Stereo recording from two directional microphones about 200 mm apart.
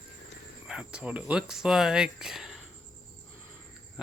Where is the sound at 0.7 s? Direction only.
5° right (ahead or behind).